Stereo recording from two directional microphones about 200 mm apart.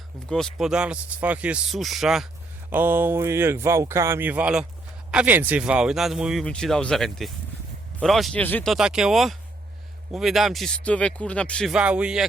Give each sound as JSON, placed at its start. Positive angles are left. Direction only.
{"t": 0.6, "sound": "speech", "side_deg": -5}